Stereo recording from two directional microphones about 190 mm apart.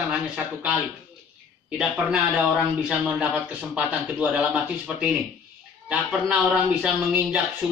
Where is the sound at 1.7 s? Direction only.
Centre (ahead or behind).